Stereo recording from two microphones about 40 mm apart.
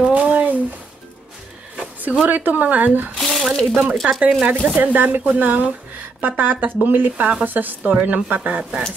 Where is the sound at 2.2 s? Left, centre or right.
Right.